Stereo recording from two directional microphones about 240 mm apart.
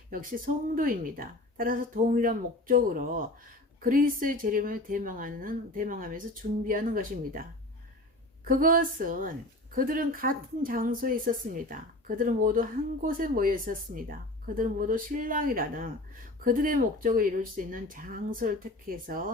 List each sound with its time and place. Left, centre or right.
0.1 s speech: right
8.4 s speech: right